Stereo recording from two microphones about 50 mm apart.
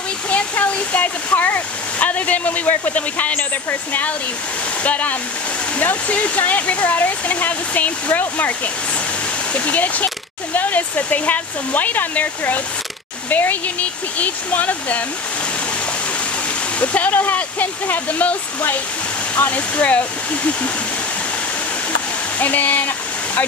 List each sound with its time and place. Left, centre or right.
0.3 s speech: left
4.8 s speech: left
16.8 s speech: left
22.4 s speech: left